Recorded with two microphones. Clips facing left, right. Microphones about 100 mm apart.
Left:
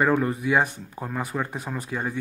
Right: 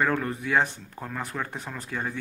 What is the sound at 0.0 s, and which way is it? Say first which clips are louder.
Speech: left 4 dB; 15° left (ahead or behind).